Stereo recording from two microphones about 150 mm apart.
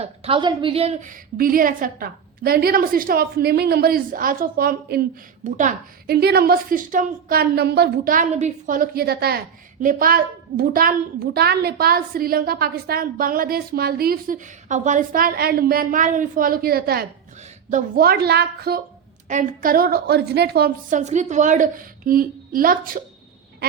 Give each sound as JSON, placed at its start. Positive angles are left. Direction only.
{"t": 0.0, "sound": "a woman's voice", "side_deg": -40}
{"t": 9.8, "sound": "a woman's voice", "side_deg": -70}
{"t": 17.7, "sound": "a woman's voice", "side_deg": -70}
{"t": 19.3, "sound": "a woman's voice", "side_deg": -65}
{"t": 21.0, "sound": "a woman's voice", "side_deg": -50}